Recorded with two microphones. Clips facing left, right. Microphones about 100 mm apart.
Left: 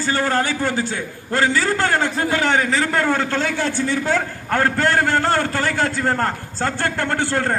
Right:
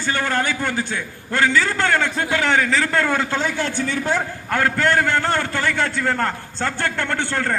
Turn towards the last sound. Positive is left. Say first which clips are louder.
# left 2 dB
turn(degrees=30)  # may be behind; listen again after turning